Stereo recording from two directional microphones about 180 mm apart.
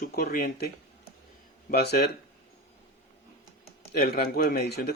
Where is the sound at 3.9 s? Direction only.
55° left (ahead or behind).